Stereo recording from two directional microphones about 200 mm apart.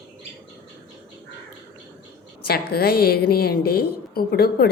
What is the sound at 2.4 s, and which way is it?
A woman's voice, 50° left (ahead or behind).